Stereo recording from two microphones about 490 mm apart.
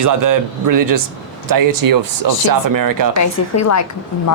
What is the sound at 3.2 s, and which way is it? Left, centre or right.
Speech, left.